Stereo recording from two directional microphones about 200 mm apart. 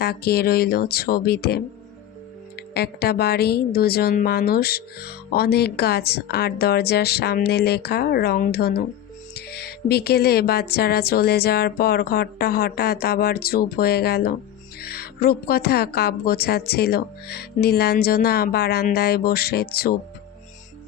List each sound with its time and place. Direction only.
0.0 s a woman's voice: 50° left (ahead or behind)
2.7 s a woman's voice: 55° left (ahead or behind)